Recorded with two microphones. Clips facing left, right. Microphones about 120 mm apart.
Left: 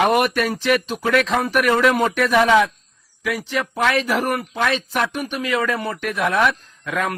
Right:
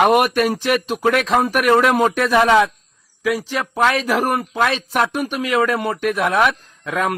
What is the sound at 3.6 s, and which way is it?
A man's voice, 35° right (ahead or behind).